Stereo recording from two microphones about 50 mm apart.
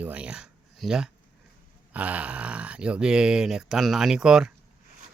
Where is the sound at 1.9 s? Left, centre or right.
Right; by 4.5 s centre.